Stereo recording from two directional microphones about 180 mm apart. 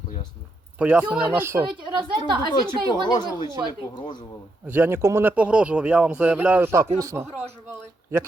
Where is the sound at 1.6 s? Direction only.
25° right (ahead or behind).